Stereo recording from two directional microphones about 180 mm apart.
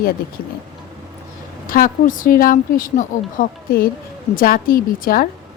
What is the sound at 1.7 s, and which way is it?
A woman's voice, 50° left (ahead or behind).